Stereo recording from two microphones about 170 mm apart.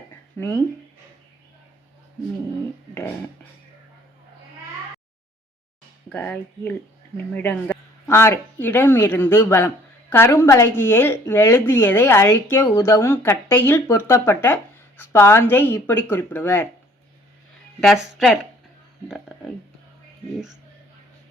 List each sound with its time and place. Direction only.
0.3 s speech: 20° left (ahead or behind)
6.1 s speech: 10° left (ahead or behind)
17.7 s a woman's voice: centre (ahead or behind)